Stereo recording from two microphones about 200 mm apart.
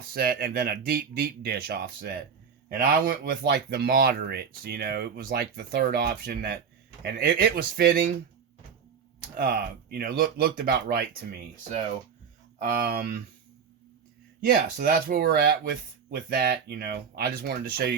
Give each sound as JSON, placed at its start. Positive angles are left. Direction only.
{"t": 0.1, "sound": "speech", "side_deg": -50}
{"t": 9.3, "sound": "speech", "side_deg": -45}
{"t": 12.5, "sound": "speech", "side_deg": -45}
{"t": 14.4, "sound": "speech", "side_deg": -45}